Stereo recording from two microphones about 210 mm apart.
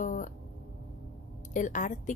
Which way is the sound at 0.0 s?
35° left (ahead or behind).